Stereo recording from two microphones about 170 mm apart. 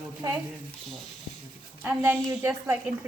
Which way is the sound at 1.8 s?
10° right (ahead or behind).